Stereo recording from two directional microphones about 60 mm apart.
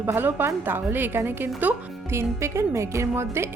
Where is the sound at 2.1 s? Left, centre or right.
Right.